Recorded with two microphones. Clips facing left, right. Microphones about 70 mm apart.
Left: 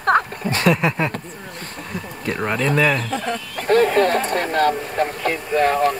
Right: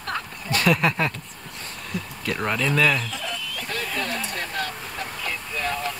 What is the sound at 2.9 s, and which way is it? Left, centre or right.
Speech, left.